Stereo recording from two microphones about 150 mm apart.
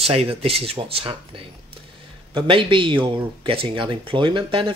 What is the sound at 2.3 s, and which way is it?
Speech, 35° right (ahead or behind).